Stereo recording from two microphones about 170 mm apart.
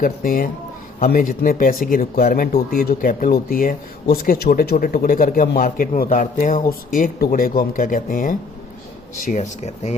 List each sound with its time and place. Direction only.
0.0 s speech: 55° left (ahead or behind)